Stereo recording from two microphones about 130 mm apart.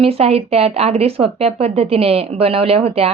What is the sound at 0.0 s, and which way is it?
A woman's voice, 50° right (ahead or behind).